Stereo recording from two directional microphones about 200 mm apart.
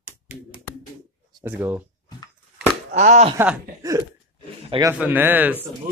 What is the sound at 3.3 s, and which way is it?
A man's voice, 15° right (ahead or behind).